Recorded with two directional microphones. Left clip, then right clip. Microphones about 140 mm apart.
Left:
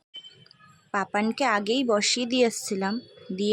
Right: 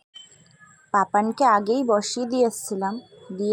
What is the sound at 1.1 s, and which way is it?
Speech, 25° left (ahead or behind).